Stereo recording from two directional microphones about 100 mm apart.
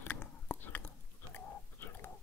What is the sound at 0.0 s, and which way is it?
Chewing, 15° left (ahead or behind).